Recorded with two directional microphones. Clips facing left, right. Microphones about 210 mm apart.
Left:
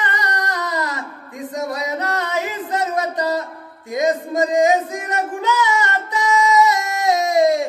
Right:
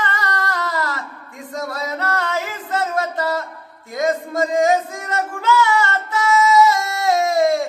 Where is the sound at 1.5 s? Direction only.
15° left (ahead or behind).